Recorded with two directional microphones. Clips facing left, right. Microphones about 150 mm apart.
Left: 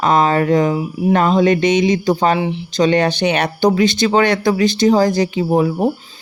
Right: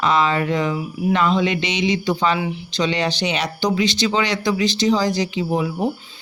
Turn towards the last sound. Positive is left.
turn(degrees=45)  # may be behind; listen again after turning